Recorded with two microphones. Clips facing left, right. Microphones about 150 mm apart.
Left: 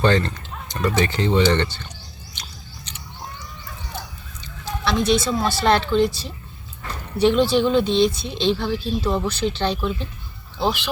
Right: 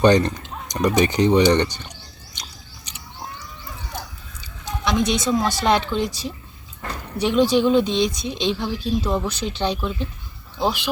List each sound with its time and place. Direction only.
0.0 s speech: 15° right (ahead or behind)
2.4 s scissors: 10° right (ahead or behind)
4.6 s a woman's voice: 15° right (ahead or behind)